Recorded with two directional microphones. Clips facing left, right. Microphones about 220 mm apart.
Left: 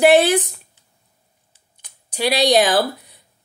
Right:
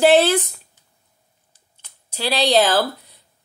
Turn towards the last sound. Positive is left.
turn(degrees=15)  # may be behind; listen again after turning